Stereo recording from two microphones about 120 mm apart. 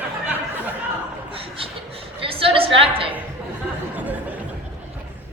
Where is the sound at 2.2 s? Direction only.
50° right (ahead or behind).